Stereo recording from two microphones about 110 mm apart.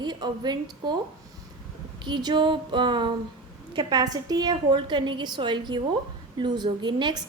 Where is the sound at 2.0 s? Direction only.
40° right (ahead or behind).